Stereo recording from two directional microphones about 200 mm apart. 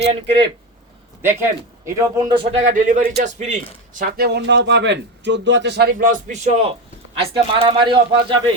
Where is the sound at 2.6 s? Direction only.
40° right (ahead or behind).